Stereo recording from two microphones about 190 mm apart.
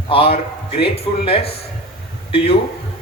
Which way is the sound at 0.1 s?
30° left (ahead or behind).